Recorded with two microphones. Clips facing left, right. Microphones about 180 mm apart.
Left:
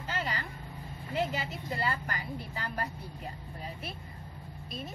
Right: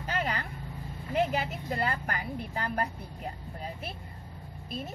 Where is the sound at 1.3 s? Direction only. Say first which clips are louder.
Right 4 dB; 55° right (ahead or behind).